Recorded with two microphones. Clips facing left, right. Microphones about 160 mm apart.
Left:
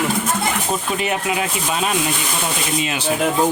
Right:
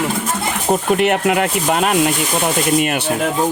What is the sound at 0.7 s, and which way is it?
Speech, 65° right (ahead or behind).